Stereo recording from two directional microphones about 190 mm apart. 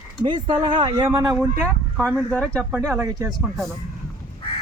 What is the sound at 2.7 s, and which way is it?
Speech, 15° right (ahead or behind).